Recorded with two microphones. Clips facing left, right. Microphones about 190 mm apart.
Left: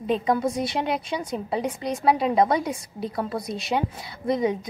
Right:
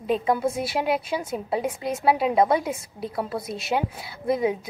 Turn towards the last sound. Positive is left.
turn(degrees=-5)  # may be behind; listen again after turning